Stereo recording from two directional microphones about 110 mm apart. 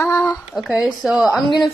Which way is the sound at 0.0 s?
25° left (ahead or behind).